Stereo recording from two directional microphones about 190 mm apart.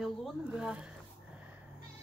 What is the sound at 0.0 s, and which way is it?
Speech, centre (ahead or behind).